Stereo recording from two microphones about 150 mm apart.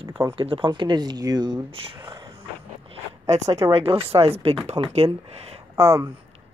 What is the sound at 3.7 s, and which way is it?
Speech, 40° right (ahead or behind).